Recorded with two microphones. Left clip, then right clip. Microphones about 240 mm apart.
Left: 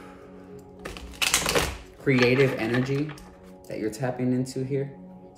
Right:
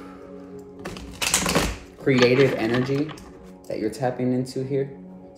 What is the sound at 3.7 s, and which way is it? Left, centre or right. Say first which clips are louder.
Speech: right 4 dB; centre.